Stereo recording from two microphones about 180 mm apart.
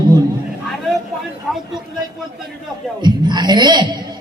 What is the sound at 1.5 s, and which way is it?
Speech, centre (ahead or behind).